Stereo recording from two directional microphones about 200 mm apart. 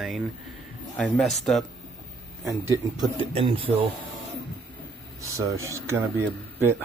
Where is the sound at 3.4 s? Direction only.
25° right (ahead or behind).